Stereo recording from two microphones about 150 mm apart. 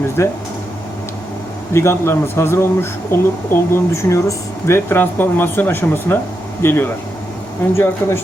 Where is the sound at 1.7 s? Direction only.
15° left (ahead or behind).